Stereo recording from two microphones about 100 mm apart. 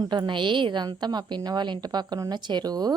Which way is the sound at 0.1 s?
50° right (ahead or behind).